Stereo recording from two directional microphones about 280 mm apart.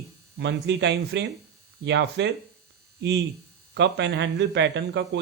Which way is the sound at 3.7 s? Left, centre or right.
Right.